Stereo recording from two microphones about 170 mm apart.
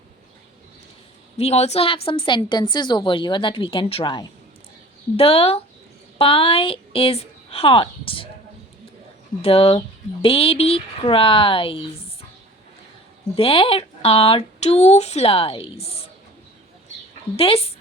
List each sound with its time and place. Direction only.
1.4 s a woman's voice: 40° left (ahead or behind)
9.4 s speech: 35° left (ahead or behind)
13.3 s speech: 30° left (ahead or behind)
17.3 s speech: 35° left (ahead or behind)